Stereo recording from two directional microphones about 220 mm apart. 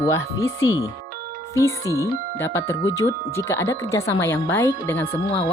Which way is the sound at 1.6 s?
15° left (ahead or behind).